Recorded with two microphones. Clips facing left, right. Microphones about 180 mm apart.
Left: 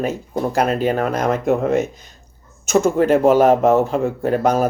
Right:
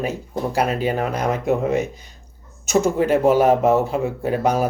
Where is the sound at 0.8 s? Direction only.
50° left (ahead or behind).